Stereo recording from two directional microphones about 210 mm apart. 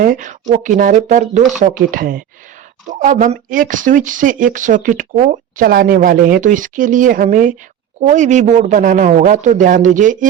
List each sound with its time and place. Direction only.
0.0 s speech: 40° right (ahead or behind)